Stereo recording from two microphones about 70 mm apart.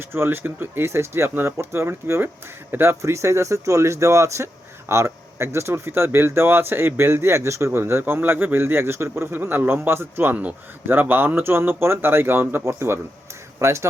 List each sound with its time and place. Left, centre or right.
0.1 s speech: right
3.0 s speech: right